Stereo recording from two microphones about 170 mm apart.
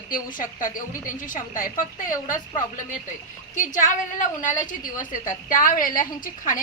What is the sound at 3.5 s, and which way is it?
A woman's voice, 50° left (ahead or behind).